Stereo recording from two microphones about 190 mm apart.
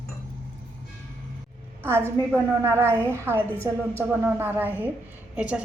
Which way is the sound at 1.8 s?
10° right (ahead or behind).